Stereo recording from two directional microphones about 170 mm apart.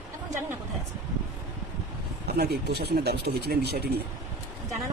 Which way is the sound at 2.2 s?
70° right (ahead or behind).